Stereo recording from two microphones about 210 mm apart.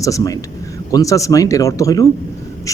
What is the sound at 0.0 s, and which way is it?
Speech, 15° left (ahead or behind).